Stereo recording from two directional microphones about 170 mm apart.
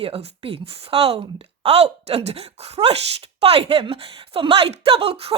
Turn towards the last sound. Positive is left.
turn(degrees=-35)  # may be behind; listen again after turning